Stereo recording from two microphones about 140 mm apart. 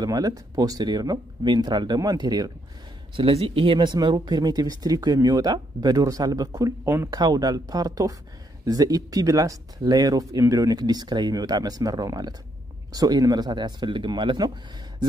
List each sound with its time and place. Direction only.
0.0 s speech: 25° right (ahead or behind)
3.2 s speech: 40° right (ahead or behind)